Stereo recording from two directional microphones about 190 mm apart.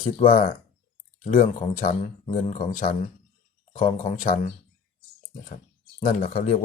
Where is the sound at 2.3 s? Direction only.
40° left (ahead or behind).